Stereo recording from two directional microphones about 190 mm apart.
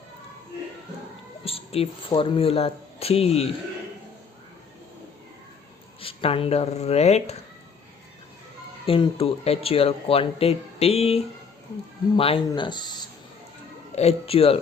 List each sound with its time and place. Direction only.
1.5 s a woman's voice: 30° left (ahead or behind)
6.0 s speech: 30° left (ahead or behind)
8.9 s speech: 30° left (ahead or behind)
13.9 s speech: 35° left (ahead or behind)